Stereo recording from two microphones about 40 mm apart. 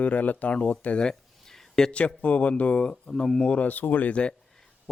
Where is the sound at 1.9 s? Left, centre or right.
Left.